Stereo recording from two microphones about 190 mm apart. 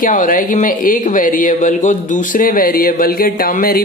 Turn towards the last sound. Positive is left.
turn(degrees=50)  # may be behind; listen again after turning